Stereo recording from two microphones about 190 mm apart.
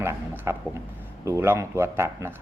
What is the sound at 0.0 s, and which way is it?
Speech, 15° right (ahead or behind).